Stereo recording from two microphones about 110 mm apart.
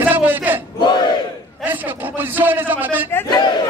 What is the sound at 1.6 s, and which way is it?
A man's voice, 15° right (ahead or behind).